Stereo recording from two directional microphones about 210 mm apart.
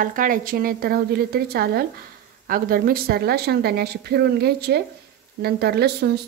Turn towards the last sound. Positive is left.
turn(degrees=-50)  # may be behind; listen again after turning